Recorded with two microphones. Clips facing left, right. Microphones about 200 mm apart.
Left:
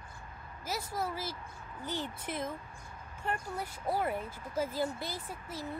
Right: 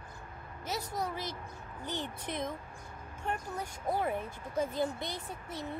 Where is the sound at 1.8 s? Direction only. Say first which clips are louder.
Left 1 dB; 10° left (ahead or behind).